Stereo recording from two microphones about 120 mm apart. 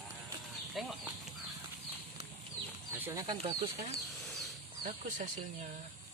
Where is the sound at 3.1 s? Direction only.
35° right (ahead or behind).